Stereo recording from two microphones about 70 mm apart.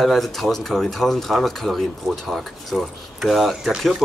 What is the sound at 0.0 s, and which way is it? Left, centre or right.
Speech, centre.